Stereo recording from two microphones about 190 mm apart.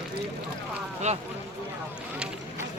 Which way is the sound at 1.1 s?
35° right (ahead or behind).